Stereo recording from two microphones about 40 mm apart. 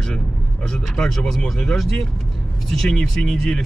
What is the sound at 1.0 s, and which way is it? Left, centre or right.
Speech, centre.